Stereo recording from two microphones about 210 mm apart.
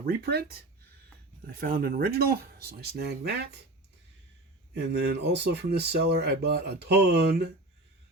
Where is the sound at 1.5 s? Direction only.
45° right (ahead or behind).